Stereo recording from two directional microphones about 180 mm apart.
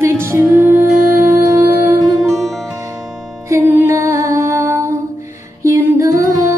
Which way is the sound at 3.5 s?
15° right (ahead or behind).